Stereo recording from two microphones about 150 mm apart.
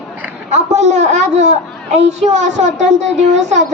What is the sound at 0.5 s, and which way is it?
A woman's voice, 50° right (ahead or behind).